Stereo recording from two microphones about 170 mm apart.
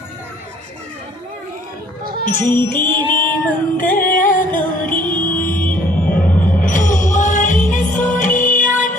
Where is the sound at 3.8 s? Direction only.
55° left (ahead or behind).